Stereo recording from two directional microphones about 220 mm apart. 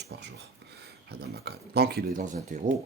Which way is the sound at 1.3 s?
45° right (ahead or behind).